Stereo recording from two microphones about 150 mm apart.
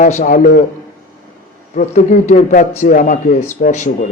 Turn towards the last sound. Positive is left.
turn(degrees=55)  # may be behind; listen again after turning